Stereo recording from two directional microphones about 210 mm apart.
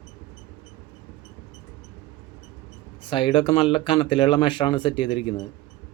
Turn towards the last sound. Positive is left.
turn(degrees=20)  # may be behind; listen again after turning